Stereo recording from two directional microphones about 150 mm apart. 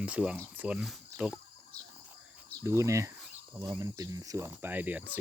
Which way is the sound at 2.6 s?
20° right (ahead or behind).